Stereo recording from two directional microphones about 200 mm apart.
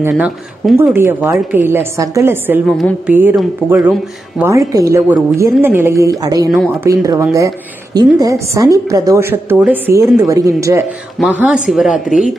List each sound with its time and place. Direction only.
0.1 s speech: centre (ahead or behind)
0.9 s a woman's voice: 10° right (ahead or behind)